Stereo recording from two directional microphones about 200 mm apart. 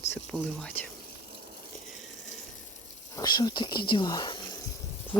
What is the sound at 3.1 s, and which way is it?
Speech, 20° left (ahead or behind).